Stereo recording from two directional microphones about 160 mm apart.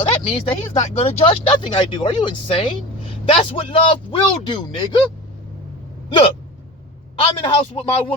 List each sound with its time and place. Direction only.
0.3 s speech: 35° left (ahead or behind)
7.2 s speech: 35° left (ahead or behind)